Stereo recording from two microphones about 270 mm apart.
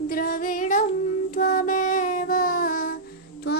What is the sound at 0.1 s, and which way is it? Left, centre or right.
Female singing, left.